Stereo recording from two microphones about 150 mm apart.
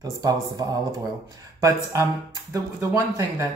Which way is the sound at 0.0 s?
25° right (ahead or behind).